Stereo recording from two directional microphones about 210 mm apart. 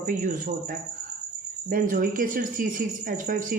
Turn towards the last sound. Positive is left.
turn(degrees=-40)  # may be behind; listen again after turning